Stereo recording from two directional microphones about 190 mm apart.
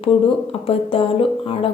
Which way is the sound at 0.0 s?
30° left (ahead or behind).